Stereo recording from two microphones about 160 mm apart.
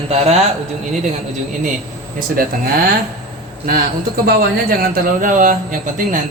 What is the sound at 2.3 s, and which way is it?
Speech, 65° right (ahead or behind).